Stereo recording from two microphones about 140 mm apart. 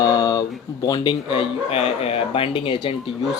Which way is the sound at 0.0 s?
25° left (ahead or behind).